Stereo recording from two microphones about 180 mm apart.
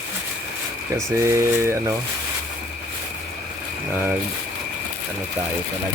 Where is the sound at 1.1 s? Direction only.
15° right (ahead or behind).